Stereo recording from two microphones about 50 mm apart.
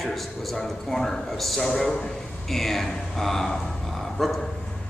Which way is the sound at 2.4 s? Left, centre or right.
Centre.